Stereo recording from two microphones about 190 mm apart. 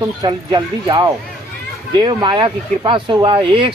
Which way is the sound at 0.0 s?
20° right (ahead or behind).